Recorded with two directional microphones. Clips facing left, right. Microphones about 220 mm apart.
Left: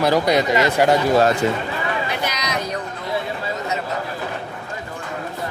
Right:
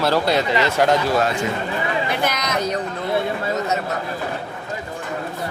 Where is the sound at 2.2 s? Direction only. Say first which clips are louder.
Right 3 dB; 50° right (ahead or behind).